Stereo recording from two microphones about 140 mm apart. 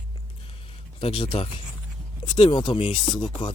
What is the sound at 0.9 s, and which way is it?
Speech, 40° left (ahead or behind).